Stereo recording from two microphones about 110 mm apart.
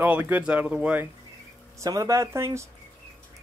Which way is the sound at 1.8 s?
30° right (ahead or behind).